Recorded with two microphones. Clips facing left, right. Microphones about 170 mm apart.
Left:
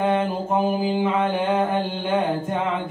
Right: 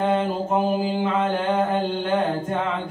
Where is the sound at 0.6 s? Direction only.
Centre (ahead or behind).